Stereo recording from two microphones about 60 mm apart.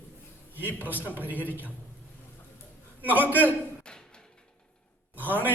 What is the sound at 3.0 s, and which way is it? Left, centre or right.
Speech, right.